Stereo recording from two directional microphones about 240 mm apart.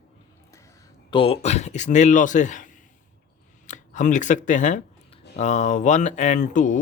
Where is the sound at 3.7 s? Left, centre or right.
Left.